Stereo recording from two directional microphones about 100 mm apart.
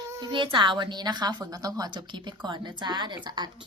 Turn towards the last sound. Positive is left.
turn(degrees=-45)  # may be behind; listen again after turning